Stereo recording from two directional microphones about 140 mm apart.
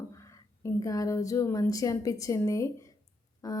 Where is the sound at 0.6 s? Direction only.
25° left (ahead or behind).